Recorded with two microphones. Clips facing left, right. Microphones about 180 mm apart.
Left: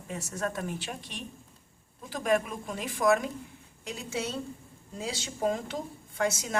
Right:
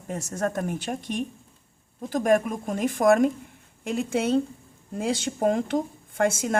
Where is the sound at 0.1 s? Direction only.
45° right (ahead or behind).